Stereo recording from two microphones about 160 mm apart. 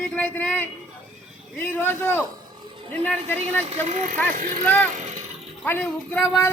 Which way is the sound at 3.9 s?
50° right (ahead or behind).